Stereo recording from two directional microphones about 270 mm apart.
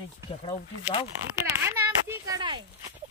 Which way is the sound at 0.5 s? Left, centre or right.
Left.